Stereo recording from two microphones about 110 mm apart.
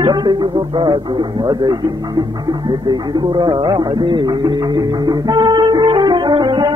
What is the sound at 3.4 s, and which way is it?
Music, 45° right (ahead or behind).